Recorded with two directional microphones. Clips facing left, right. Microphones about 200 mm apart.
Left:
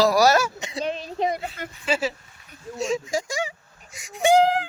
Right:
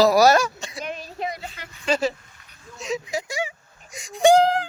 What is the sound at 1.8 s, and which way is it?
Speech, 5° left (ahead or behind).